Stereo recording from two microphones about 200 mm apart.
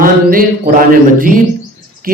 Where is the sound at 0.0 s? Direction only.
45° right (ahead or behind).